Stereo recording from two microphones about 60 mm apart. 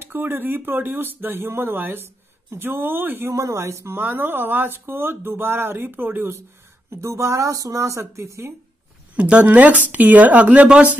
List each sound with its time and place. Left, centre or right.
0.0 s speech: right
3.3 s speech: right
4.0 s speech: right
6.9 s speech: right
8.0 s speech: right
9.1 s speech: right